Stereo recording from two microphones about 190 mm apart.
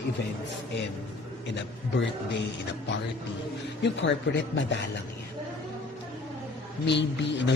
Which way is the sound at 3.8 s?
70° left (ahead or behind).